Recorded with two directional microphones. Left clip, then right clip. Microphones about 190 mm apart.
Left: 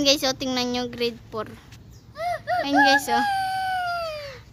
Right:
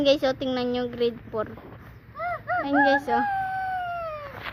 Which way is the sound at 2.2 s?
10° left (ahead or behind).